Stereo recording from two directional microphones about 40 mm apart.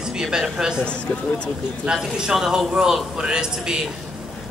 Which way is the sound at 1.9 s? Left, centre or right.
Right.